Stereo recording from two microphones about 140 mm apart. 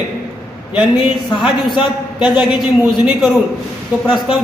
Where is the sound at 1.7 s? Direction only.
35° left (ahead or behind).